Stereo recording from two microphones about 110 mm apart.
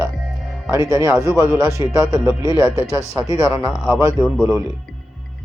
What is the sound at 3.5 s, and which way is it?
Speech, 10° right (ahead or behind).